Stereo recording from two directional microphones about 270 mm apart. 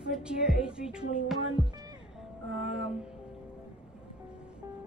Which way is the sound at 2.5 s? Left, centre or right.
Centre.